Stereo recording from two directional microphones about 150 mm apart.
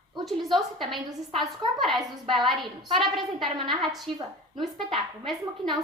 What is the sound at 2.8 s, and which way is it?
Speech, 30° right (ahead or behind).